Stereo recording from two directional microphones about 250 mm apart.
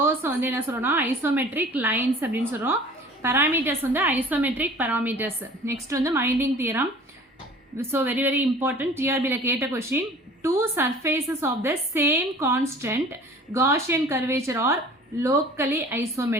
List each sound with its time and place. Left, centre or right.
0.0 s a woman's voice: centre